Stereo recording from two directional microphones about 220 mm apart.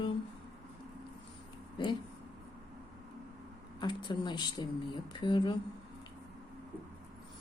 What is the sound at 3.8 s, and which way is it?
A woman's voice, 20° left (ahead or behind).